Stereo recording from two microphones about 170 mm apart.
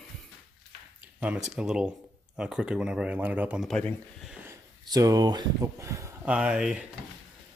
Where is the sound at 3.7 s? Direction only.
5° left (ahead or behind).